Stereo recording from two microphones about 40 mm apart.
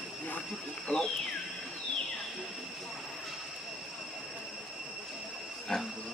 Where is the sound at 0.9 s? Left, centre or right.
Left.